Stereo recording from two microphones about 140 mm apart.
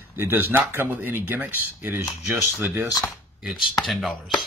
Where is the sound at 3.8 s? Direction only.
Centre (ahead or behind).